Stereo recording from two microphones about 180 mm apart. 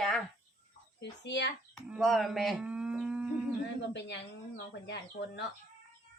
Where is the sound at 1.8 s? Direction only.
Centre (ahead or behind).